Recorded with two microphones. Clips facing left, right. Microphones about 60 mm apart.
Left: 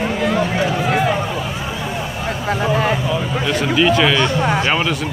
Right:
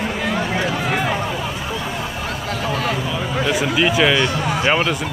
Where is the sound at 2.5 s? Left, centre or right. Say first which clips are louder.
Left 6 dB; left.